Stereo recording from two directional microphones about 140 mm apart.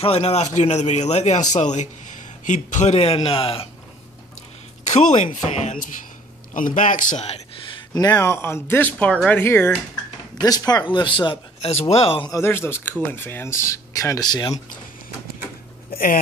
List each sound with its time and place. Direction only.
0.0 s a man's voice: 45° left (ahead or behind)
4.8 s speech: 55° left (ahead or behind)
6.5 s speech: 70° left (ahead or behind); by 7.4 s 50° left (ahead or behind)
7.9 s speech: 25° left (ahead or behind)
10.4 s a man's voice: 25° left (ahead or behind); by 12.3 s 45° left (ahead or behind)
12.3 s speech: 20° left (ahead or behind)